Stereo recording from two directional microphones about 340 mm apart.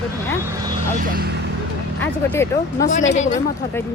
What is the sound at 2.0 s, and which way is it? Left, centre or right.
Speech, centre.